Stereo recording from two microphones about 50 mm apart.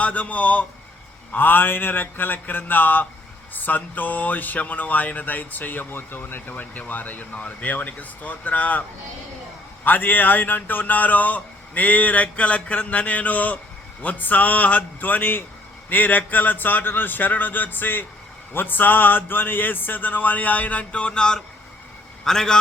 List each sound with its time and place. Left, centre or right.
0.0 s speech: left
1.3 s speech: left
9.8 s a man's voice: left; by 22.5 s centre